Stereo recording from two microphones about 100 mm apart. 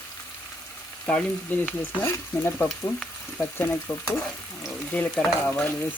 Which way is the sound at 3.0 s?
15° left (ahead or behind).